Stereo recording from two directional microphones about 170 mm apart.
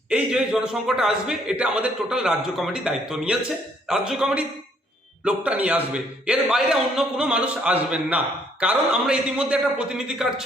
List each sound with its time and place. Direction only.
0.1 s a man's voice: 5° right (ahead or behind)